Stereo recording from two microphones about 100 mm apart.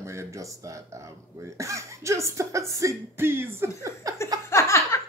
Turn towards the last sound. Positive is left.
turn(degrees=30)  # may be behind; listen again after turning